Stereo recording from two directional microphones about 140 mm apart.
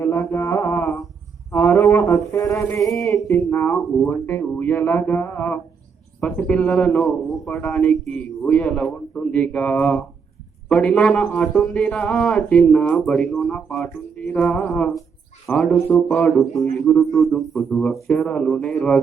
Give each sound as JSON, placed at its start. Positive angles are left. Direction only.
{"t": 0.3, "sound": "mantra", "side_deg": 25}
{"t": 1.5, "sound": "a sound", "side_deg": 15}
{"t": 3.2, "sound": "a man's voice", "side_deg": 15}